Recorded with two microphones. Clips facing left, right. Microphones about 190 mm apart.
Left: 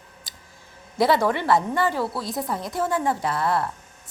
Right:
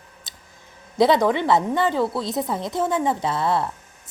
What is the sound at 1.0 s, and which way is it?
A woman's voice, 20° right (ahead or behind).